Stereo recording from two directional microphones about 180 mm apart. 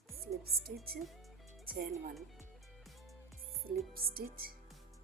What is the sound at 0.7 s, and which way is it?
Speech, 10° right (ahead or behind).